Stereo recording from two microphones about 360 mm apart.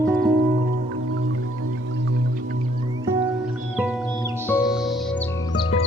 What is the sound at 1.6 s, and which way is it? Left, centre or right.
Music, right.